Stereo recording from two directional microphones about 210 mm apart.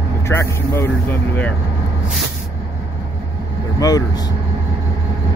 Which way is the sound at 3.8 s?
20° left (ahead or behind).